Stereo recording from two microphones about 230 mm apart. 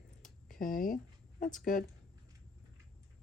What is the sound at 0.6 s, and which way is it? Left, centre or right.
Speech, left.